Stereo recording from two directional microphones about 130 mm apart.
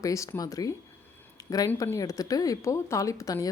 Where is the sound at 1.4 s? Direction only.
30° left (ahead or behind).